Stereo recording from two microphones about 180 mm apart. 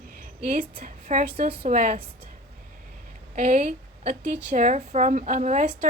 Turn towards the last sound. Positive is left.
turn(degrees=-45)  # may be behind; listen again after turning